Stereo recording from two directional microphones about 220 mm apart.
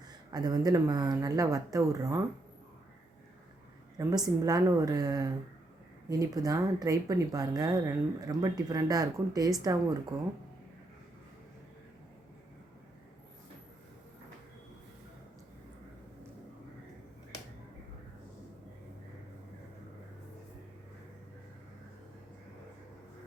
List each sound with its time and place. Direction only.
0.3 s speech: 15° right (ahead or behind)
3.9 s speech: 15° right (ahead or behind)